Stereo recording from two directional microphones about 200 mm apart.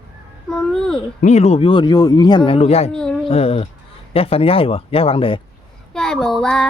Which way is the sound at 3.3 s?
30° left (ahead or behind).